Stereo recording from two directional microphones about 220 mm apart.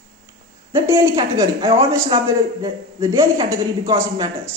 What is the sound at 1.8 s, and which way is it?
A woman's voice, 15° right (ahead or behind).